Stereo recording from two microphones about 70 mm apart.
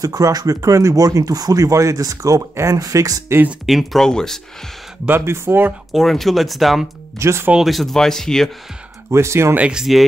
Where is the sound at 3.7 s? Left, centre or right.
Centre.